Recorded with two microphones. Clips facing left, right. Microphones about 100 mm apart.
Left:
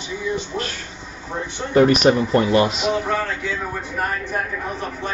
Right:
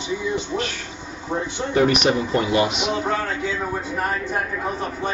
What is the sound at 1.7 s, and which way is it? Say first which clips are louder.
Speech: left 4 dB; 40° left (ahead or behind).